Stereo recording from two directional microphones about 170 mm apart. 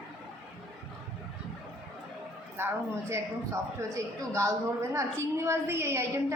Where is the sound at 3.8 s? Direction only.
15° right (ahead or behind).